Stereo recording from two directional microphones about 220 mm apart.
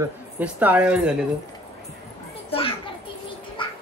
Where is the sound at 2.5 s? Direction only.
25° left (ahead or behind).